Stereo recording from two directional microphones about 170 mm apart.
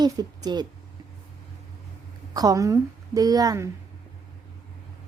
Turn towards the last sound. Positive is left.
turn(degrees=-20)  # may be behind; listen again after turning